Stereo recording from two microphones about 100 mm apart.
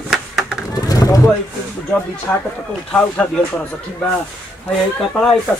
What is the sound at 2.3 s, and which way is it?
Speech, 20° left (ahead or behind).